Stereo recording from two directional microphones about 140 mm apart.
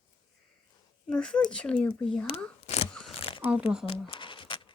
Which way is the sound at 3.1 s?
45° left (ahead or behind).